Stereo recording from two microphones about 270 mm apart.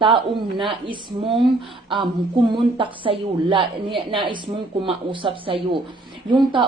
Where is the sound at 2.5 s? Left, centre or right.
Centre.